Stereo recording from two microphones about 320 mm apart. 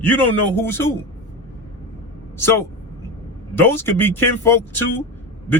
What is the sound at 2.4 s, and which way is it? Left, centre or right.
A man's voice, centre.